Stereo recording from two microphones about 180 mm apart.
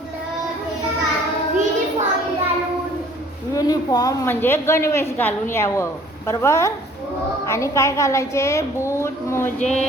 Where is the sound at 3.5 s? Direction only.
20° left (ahead or behind).